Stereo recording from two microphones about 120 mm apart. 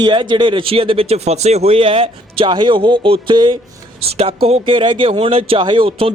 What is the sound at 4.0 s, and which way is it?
Speech, 55° right (ahead or behind).